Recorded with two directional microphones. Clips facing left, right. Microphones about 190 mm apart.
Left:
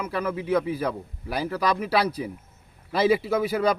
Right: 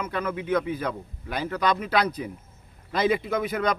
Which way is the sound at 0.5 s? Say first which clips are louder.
Left 2 dB; 35° left (ahead or behind).